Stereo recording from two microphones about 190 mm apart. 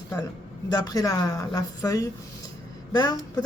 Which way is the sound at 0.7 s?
20° left (ahead or behind).